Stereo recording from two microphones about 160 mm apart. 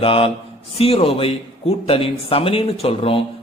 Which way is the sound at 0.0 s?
35° left (ahead or behind).